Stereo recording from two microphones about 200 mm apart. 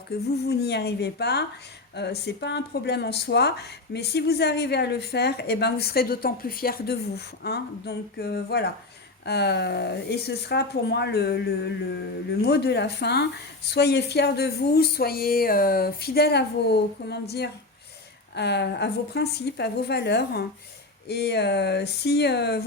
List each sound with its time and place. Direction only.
0.1 s speech: 55° left (ahead or behind)